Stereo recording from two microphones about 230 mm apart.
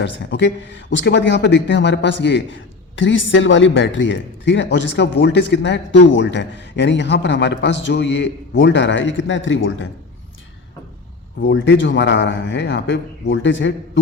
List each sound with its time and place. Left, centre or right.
0.0 s a man's voice: left
11.3 s a man's voice: left